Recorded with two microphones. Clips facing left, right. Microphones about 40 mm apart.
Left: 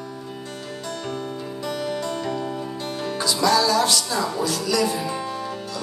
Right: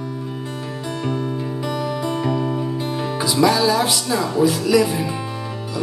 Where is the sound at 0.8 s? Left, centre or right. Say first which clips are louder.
Right 6 dB; centre.